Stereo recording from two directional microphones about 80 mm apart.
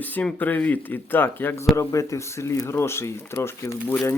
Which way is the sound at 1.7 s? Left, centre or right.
Left.